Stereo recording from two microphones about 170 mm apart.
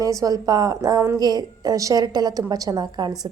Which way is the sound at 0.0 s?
20° right (ahead or behind).